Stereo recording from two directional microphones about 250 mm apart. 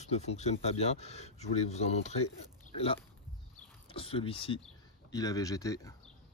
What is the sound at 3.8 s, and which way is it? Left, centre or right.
Speech, left.